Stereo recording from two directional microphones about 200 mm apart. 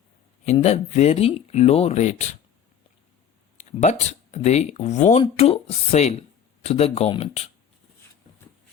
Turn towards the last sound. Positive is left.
turn(degrees=30)  # may be behind; listen again after turning